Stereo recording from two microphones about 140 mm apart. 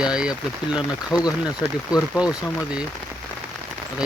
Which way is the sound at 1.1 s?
25° left (ahead or behind).